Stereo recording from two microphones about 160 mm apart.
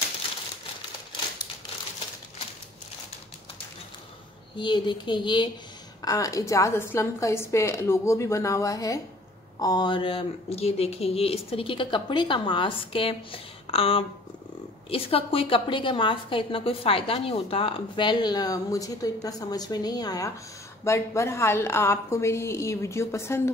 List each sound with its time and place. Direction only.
4.6 s a woman's voice: 30° left (ahead or behind)